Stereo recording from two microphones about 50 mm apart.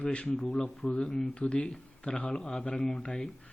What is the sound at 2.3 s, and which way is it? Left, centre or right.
Speech, centre.